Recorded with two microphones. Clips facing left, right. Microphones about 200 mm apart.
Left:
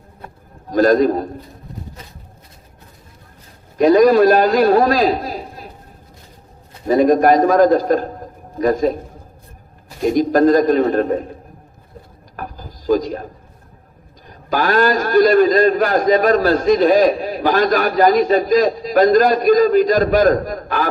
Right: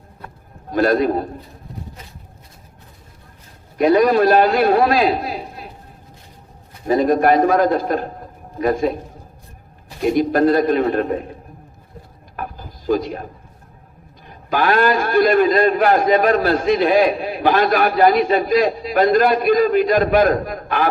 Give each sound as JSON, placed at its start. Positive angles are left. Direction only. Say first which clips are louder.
{"t": 0.7, "sound": "a man's voice", "louder": "left 3 dB", "side_deg": 40}
{"t": 3.8, "sound": "a man's voice", "louder": "left 3 dB", "side_deg": 35}
{"t": 6.8, "sound": "a man's voice", "louder": "left 3 dB", "side_deg": 40}
{"t": 10.1, "sound": "a man's voice", "louder": "left 2 dB", "side_deg": 40}
{"t": 12.4, "sound": "a sound", "louder": "right 1 dB", "side_deg": 40}
{"t": 14.3, "sound": "a man's voice", "louder": "even", "side_deg": 40}